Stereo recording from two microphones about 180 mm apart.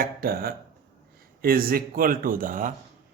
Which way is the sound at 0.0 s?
55° right (ahead or behind).